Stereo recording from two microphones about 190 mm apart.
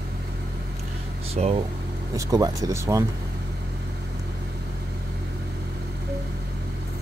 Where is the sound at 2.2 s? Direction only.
20° right (ahead or behind).